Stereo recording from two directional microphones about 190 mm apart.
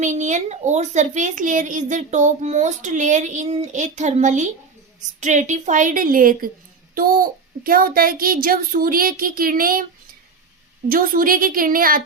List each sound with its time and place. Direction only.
0.0 s a child's voice: 40° right (ahead or behind)
10.8 s a child's voice: 50° right (ahead or behind)